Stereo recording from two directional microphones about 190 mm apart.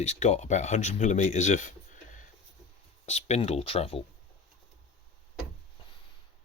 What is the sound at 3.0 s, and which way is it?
Speech, 35° left (ahead or behind).